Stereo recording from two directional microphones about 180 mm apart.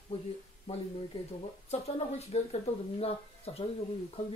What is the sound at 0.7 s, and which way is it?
Speech, 35° left (ahead or behind).